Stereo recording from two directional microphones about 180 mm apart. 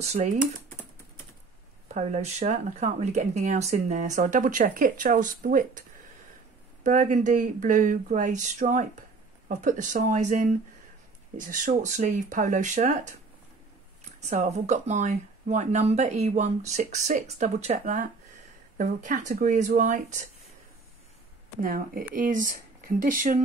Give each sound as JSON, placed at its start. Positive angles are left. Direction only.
{"t": 0.0, "sound": "speech", "side_deg": -35}
{"t": 2.0, "sound": "speech", "side_deg": -40}
{"t": 14.3, "sound": "speech", "side_deg": -40}
{"t": 21.5, "sound": "speech", "side_deg": -50}